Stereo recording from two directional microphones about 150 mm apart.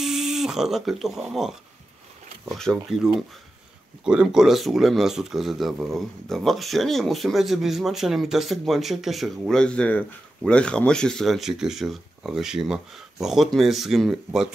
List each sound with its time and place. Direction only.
0.0 s speech: 5° right (ahead or behind)